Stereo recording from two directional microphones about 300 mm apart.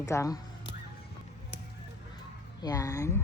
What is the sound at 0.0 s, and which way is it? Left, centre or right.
Speech, centre.